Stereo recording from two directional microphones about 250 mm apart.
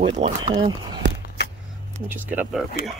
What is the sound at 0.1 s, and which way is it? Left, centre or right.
Speech, centre.